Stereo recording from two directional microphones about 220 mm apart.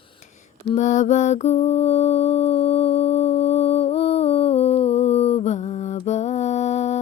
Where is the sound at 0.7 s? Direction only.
35° left (ahead or behind).